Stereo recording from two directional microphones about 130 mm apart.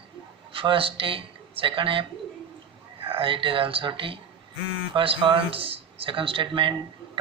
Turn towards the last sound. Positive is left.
turn(degrees=-40)  # may be behind; listen again after turning